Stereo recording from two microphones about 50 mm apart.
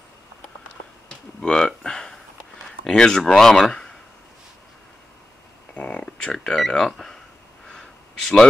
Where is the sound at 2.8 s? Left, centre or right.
Centre.